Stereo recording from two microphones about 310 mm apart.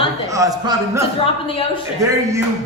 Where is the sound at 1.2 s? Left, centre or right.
Centre.